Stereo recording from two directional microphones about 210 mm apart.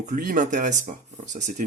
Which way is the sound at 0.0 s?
35° right (ahead or behind).